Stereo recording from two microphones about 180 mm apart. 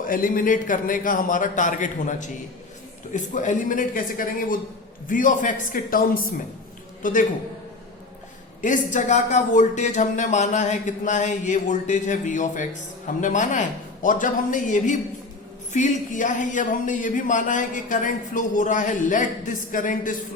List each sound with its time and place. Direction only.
0.1 s a man's voice: 50° left (ahead or behind)
8.6 s speech: 45° left (ahead or behind)